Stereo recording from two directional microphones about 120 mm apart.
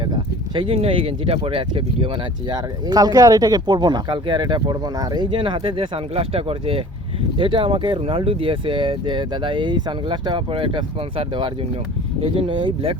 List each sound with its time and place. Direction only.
0.0 s speech: 40° right (ahead or behind)
2.5 s speech: 35° right (ahead or behind)